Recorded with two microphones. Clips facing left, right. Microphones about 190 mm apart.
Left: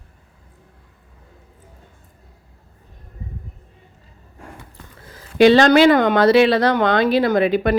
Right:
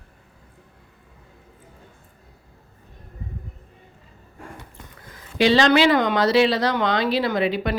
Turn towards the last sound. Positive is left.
turn(degrees=50)  # may be behind; listen again after turning